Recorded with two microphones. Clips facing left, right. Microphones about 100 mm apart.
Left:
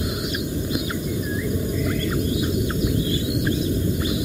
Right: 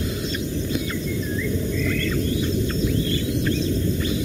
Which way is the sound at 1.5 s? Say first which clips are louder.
Even; 15° left (ahead or behind).